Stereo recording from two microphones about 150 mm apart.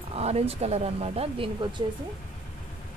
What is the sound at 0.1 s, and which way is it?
Speech, 45° right (ahead or behind).